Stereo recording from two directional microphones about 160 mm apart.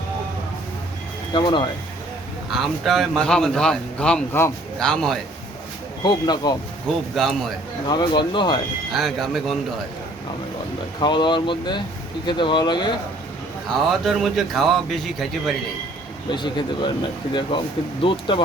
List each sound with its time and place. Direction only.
1.3 s speech: 30° left (ahead or behind)
2.5 s speech: centre (ahead or behind)
4.8 s speech: 5° left (ahead or behind)
6.0 s speech: 25° left (ahead or behind)
7.2 s speech: centre (ahead or behind)
7.9 s speech: 30° left (ahead or behind)
8.9 s speech: centre (ahead or behind)
11.0 s speech: 30° left (ahead or behind)
13.7 s speech: centre (ahead or behind)
16.3 s speech: 30° left (ahead or behind)
18.0 s speech: 30° left (ahead or behind)